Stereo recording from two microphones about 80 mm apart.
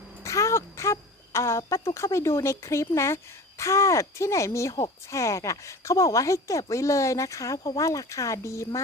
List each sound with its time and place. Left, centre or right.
0.2 s speech: left